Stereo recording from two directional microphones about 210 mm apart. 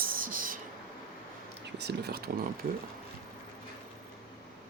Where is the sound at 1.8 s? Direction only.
50° right (ahead or behind).